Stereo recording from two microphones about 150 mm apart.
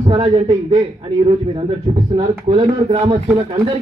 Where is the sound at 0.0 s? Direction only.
35° right (ahead or behind).